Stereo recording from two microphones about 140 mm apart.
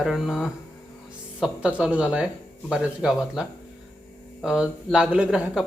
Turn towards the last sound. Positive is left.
turn(degrees=-5)  # may be behind; listen again after turning